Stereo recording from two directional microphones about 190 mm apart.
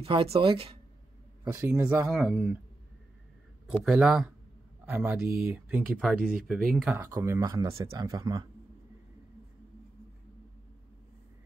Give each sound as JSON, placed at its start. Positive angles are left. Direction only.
{"t": 0.0, "sound": "speech", "side_deg": -30}
{"t": 1.6, "sound": "speech", "side_deg": -5}
{"t": 3.8, "sound": "speech", "side_deg": -5}
{"t": 7.0, "sound": "speech", "side_deg": -15}